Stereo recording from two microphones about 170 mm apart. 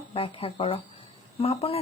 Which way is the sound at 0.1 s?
35° left (ahead or behind).